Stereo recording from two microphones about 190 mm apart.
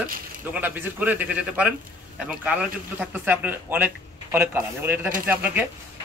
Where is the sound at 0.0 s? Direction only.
10° right (ahead or behind).